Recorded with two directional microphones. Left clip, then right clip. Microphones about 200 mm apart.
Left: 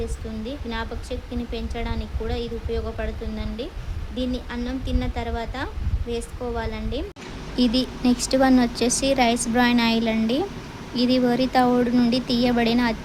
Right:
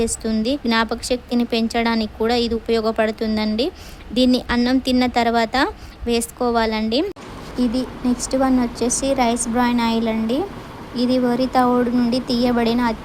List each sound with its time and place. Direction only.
0.0 s a woman's voice: 50° right (ahead or behind)
7.5 s a woman's voice: 10° left (ahead or behind)